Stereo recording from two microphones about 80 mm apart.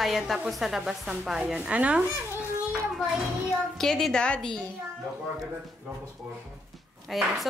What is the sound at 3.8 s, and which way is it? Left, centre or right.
Speech, centre.